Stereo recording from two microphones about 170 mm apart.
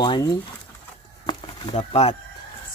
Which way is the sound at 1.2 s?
25° left (ahead or behind).